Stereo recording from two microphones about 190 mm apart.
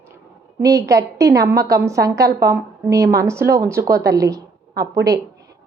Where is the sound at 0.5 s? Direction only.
15° right (ahead or behind).